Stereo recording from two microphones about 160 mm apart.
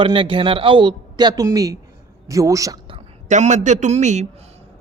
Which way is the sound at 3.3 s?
50° right (ahead or behind).